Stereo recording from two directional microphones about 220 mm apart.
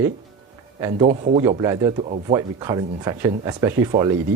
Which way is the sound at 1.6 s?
20° right (ahead or behind).